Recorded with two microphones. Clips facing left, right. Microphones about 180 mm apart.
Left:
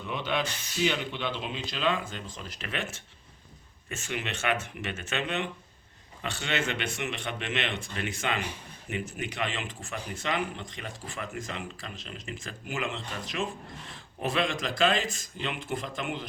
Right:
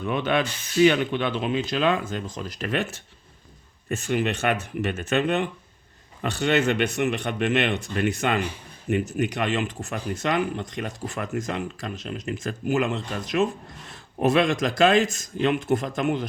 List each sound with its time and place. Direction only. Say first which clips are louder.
0.0 s speech: right 7 dB; 55° right (ahead or behind)
3.8 s speech: right 11 dB; 40° right (ahead or behind)